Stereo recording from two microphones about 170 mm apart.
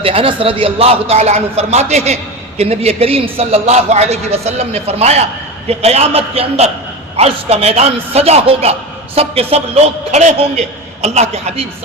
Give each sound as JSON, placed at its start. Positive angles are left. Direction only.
{"t": 0.0, "sound": "a man's voice", "side_deg": -35}